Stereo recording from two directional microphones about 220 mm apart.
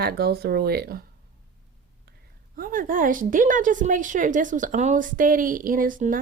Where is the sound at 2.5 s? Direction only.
40° right (ahead or behind).